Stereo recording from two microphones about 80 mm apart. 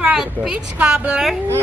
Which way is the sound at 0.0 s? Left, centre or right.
Centre.